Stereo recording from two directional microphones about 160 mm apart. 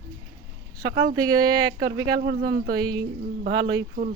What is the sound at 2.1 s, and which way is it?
Speech, 90° right.